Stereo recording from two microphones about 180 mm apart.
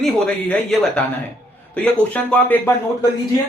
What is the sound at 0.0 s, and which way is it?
A man's voice, 5° left (ahead or behind).